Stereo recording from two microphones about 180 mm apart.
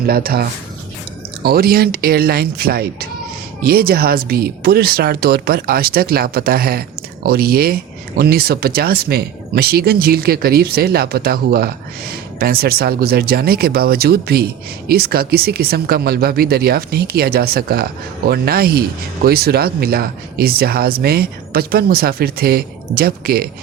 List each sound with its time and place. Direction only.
0.0 s speech: 55° right (ahead or behind)